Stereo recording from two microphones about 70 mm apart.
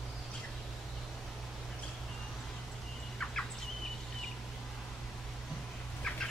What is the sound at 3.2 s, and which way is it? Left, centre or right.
Bird, centre.